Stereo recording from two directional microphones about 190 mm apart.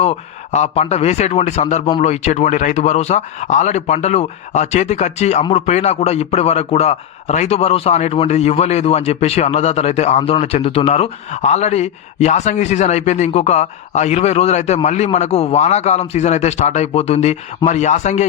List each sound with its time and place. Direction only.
0.0 s a man's voice: 35° left (ahead or behind)